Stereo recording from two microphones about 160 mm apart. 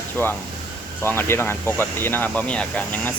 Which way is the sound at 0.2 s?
10° left (ahead or behind).